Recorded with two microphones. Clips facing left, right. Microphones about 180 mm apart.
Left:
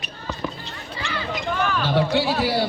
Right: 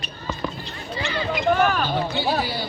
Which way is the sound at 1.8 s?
90° left.